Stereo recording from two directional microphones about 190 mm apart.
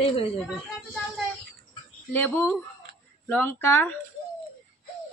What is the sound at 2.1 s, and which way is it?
Speech, 10° left (ahead or behind).